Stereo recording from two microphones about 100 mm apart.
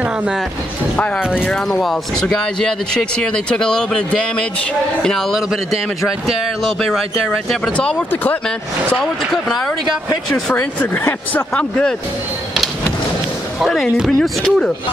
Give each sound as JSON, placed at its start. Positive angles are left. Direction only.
{"t": 0.0, "sound": "speech", "side_deg": -15}
{"t": 0.9, "sound": "speech", "side_deg": 15}
{"t": 1.2, "sound": "speech", "side_deg": -10}
{"t": 1.5, "sound": "speech", "side_deg": 5}
{"t": 7.4, "sound": "speech", "side_deg": 5}
{"t": 8.1, "sound": "speech", "side_deg": 20}
{"t": 9.0, "sound": "speech", "side_deg": 5}
{"t": 10.3, "sound": "speech", "side_deg": 20}
{"t": 13.9, "sound": "speech", "side_deg": 0}